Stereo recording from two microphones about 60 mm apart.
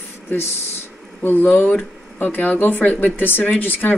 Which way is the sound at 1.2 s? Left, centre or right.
Left.